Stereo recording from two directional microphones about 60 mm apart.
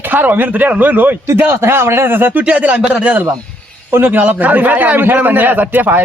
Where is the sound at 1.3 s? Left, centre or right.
Right.